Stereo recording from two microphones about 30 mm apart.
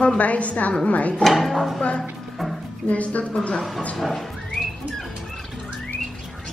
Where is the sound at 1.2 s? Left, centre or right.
Centre.